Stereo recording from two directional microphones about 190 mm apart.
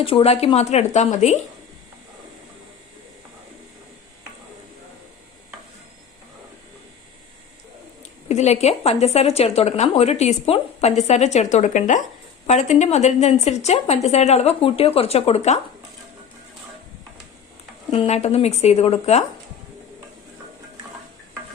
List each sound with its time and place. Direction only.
0.0 s speech: 30° left (ahead or behind)
8.3 s speech: 35° left (ahead or behind)
17.9 s speech: 35° left (ahead or behind)